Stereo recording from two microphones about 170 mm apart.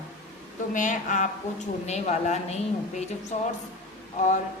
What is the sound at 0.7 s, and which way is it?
A woman's voice, 50° left (ahead or behind).